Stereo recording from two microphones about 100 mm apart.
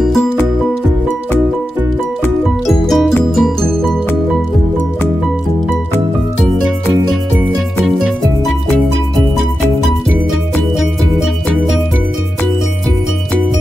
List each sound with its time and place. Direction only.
2.6 s music: centre (ahead or behind)
7.8 s music: 5° right (ahead or behind)